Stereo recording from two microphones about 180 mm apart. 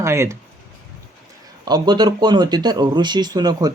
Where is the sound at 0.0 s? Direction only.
15° right (ahead or behind).